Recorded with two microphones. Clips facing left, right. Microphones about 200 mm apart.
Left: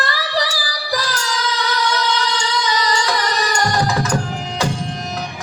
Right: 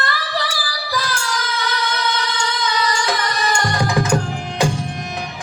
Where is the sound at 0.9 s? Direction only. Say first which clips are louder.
Even; 55° right (ahead or behind).